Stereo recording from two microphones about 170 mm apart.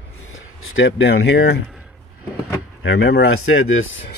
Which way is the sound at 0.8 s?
85° left.